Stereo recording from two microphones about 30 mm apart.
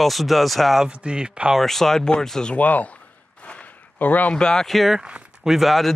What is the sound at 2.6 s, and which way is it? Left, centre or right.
Speech, left.